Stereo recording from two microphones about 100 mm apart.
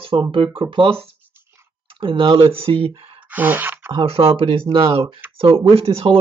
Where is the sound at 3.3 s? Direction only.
20° right (ahead or behind).